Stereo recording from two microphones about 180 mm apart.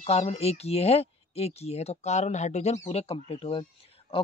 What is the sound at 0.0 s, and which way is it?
Speech, 35° left (ahead or behind).